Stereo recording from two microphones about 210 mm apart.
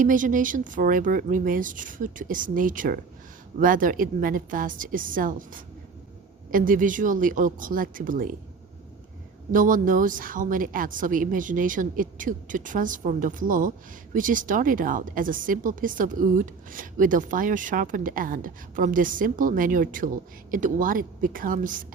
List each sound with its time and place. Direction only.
0.0 s a woman's voice: 40° right (ahead or behind)
9.5 s a woman's voice: 40° right (ahead or behind)